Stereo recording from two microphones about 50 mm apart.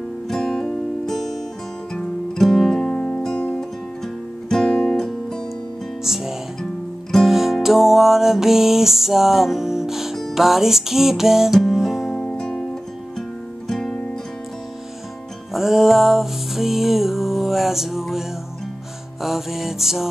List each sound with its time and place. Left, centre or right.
0.3 s music: centre
4.0 s music: centre
6.0 s music: centre
12.2 s music: centre
13.7 s music: centre
15.5 s music: centre
19.2 s music: centre